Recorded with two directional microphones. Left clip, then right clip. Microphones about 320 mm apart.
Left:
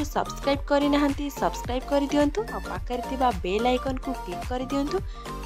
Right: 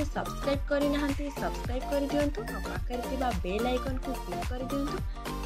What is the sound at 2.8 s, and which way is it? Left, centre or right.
Speech, left.